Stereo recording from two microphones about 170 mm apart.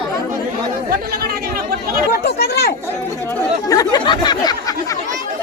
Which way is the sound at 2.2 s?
70° left (ahead or behind).